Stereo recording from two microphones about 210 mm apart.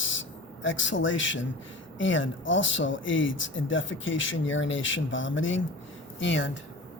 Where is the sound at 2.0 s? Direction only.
65° left (ahead or behind).